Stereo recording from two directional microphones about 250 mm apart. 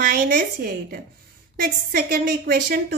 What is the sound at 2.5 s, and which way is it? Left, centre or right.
Speech, right.